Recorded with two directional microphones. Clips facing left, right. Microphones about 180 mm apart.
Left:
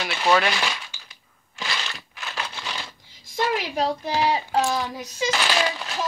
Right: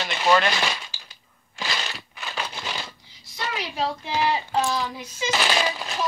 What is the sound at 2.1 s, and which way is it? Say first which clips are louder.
Crumpling: right 1 dB; 5° right (ahead or behind).